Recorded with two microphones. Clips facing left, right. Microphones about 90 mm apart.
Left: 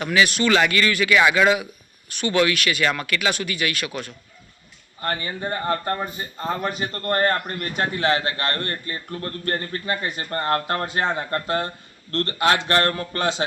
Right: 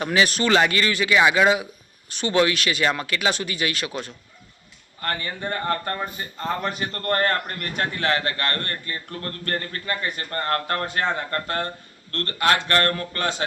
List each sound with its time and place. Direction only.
0.0 s speech: 35° right (ahead or behind)
4.9 s a man's voice: 10° left (ahead or behind)